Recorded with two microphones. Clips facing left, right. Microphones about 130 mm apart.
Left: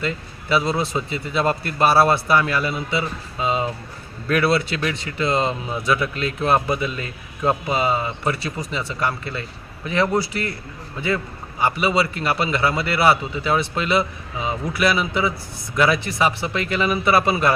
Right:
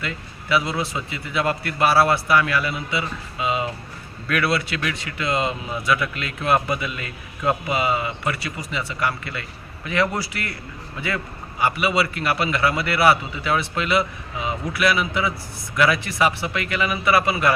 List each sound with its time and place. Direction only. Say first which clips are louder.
0.0 s speech: left 5 dB; 30° left (ahead or behind)
3.4 s music: left 2 dB; 35° left (ahead or behind)
4.3 s speech: left 3 dB; 30° left (ahead or behind)
11.6 s speech: left 1 dB; 25° left (ahead or behind)